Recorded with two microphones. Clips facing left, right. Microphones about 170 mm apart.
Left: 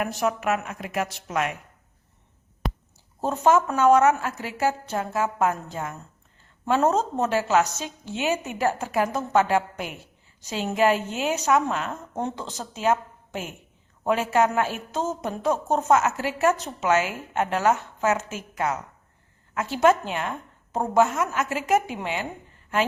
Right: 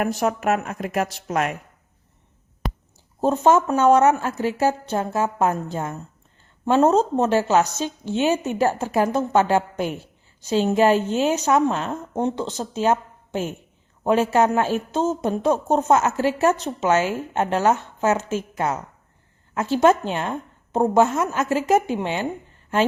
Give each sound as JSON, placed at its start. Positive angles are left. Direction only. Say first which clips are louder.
{"t": 0.0, "sound": "a woman's voice", "louder": "right 3 dB", "side_deg": -40}
{"t": 2.6, "sound": "a sound", "louder": "right 1 dB", "side_deg": 0}
{"t": 3.2, "sound": "a woman's voice", "louder": "right 3 dB", "side_deg": -25}